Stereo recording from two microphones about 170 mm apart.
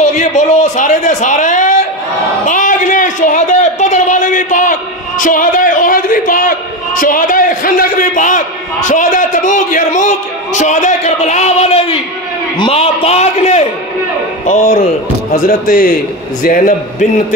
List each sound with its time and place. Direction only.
0.0 s a man's voice: 45° left (ahead or behind)
5.2 s a sound: 50° left (ahead or behind)
7.0 s a man's voice: 55° left (ahead or behind)